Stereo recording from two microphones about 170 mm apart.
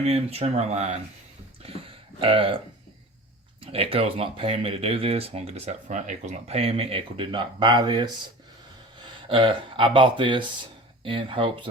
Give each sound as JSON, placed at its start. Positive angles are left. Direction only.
{"t": 0.0, "sound": "speech", "side_deg": -35}
{"t": 2.2, "sound": "speech", "side_deg": -30}
{"t": 3.6, "sound": "speech", "side_deg": -35}